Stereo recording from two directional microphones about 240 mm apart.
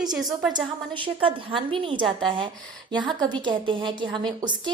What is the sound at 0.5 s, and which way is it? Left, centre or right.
A woman's voice, right.